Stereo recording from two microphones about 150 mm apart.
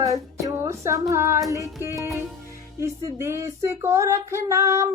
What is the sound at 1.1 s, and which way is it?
Child singing, 20° right (ahead or behind).